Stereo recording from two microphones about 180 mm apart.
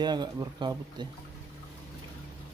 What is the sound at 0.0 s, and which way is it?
Speech, 25° right (ahead or behind).